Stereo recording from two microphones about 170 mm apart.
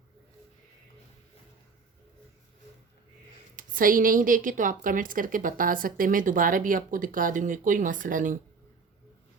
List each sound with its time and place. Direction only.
3.5 s a woman's voice: 55° right (ahead or behind)